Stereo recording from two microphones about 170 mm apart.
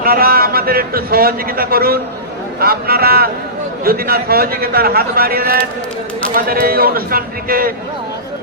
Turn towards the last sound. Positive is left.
turn(degrees=-60)  # may be behind; listen again after turning